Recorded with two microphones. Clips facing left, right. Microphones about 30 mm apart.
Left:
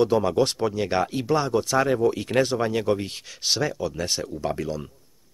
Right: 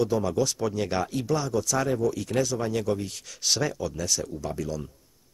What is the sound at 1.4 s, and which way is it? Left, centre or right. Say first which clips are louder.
A man's voice: left 4 dB; left.